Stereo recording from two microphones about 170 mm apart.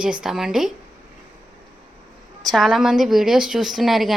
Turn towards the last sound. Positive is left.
turn(degrees=0)  # may be behind; listen again after turning